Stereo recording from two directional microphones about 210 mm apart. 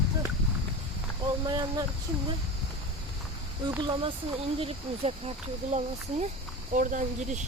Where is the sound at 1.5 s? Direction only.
20° right (ahead or behind).